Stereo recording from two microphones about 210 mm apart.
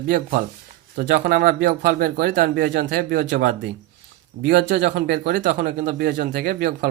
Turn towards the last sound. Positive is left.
turn(degrees=-45)  # may be behind; listen again after turning